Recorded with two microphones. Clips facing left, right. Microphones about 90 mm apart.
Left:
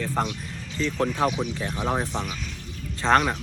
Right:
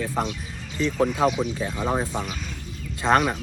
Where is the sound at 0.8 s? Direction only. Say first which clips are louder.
Right 3 dB; 10° right (ahead or behind).